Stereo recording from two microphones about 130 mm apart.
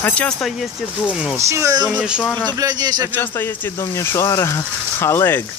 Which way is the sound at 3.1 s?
15° left (ahead or behind).